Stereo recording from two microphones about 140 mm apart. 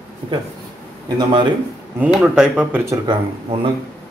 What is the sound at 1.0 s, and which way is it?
Speech, 35° right (ahead or behind).